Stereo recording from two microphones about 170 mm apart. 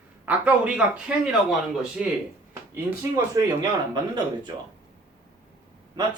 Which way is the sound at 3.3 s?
20° right (ahead or behind).